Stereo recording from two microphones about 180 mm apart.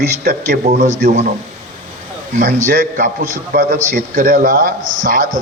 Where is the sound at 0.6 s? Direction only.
40° right (ahead or behind).